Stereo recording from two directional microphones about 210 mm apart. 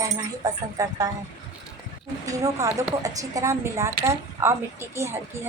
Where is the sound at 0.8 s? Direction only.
15° right (ahead or behind).